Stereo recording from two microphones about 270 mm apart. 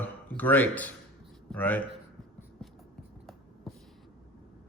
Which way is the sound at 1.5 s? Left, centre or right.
Centre.